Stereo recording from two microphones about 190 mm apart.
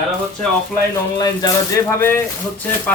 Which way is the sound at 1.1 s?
20° left (ahead or behind).